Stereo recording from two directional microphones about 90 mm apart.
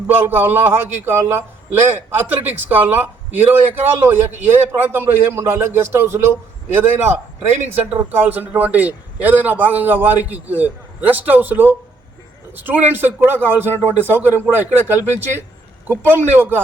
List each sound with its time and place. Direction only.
0.1 s a man's voice: 25° right (ahead or behind)